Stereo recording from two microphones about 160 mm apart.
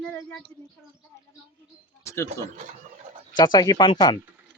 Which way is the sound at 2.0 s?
20° left (ahead or behind).